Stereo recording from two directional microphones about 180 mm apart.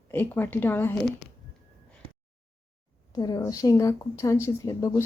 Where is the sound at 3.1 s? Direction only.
20° left (ahead or behind).